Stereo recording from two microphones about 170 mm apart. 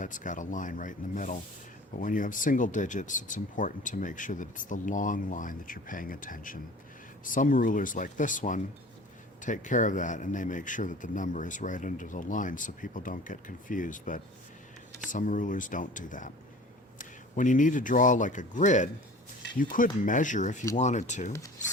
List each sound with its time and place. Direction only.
0.0 s speech: 50° left (ahead or behind)